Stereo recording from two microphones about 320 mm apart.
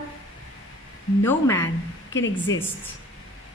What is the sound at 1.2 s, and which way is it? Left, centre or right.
Speech, centre.